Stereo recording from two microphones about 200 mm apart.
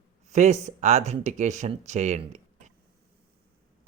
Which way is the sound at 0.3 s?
35° right (ahead or behind).